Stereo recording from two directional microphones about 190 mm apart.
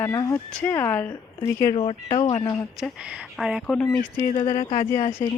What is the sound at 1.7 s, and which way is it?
Speech, 30° left (ahead or behind).